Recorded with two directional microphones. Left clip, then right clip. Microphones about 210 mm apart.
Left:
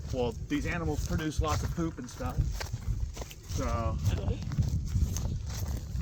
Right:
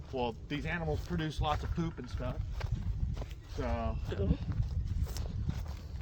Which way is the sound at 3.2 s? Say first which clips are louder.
Left 3 dB; 60° left (ahead or behind).